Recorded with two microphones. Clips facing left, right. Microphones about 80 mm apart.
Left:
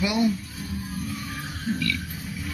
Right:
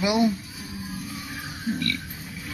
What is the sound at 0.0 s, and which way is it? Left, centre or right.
Speech, right.